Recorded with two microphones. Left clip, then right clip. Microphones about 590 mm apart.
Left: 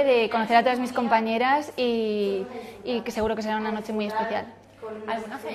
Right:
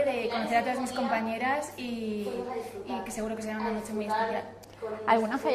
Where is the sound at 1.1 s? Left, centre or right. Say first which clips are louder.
Left 9 dB; left.